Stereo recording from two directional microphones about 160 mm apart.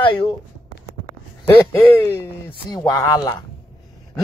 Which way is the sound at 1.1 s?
30° left (ahead or behind).